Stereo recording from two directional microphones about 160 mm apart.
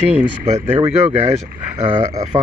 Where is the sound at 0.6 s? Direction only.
15° right (ahead or behind).